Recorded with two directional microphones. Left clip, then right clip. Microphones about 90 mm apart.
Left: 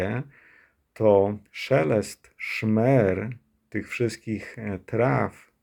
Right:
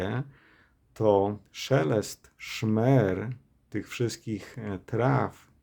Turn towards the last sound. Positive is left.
turn(degrees=-25)  # may be behind; listen again after turning